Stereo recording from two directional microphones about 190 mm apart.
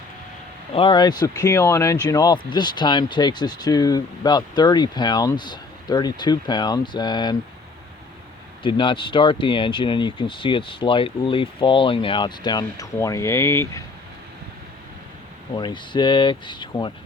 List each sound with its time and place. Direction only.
0.7 s speech: 25° left (ahead or behind)
8.6 s speech: 25° left (ahead or behind)
15.5 s speech: 25° left (ahead or behind)